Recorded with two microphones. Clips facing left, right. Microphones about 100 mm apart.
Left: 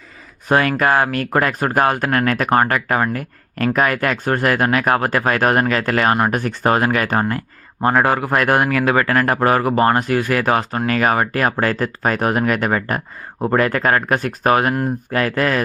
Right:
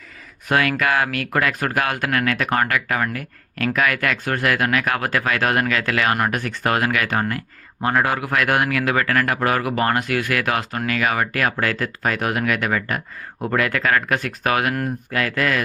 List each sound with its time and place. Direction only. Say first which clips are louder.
0.4 s speech: left 4 dB; 35° left (ahead or behind)